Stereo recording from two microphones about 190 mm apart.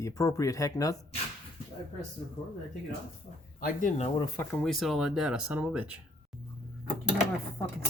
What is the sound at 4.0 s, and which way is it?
Speech, 20° left (ahead or behind).